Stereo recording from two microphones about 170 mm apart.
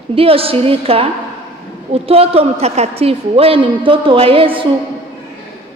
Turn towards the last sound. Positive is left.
turn(degrees=-30)  # may be behind; listen again after turning